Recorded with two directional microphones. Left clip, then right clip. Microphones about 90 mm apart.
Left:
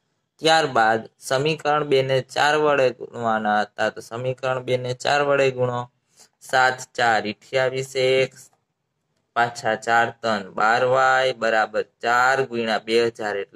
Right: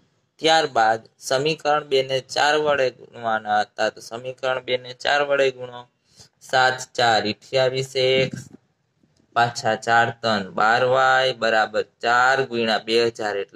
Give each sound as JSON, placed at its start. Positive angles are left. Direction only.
{"t": 0.4, "sound": "speech", "side_deg": 15}
{"t": 4.6, "sound": "speech", "side_deg": 25}
{"t": 9.3, "sound": "speech", "side_deg": -5}